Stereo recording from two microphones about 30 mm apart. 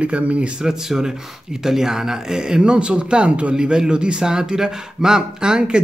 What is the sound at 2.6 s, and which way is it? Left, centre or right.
Speech, right.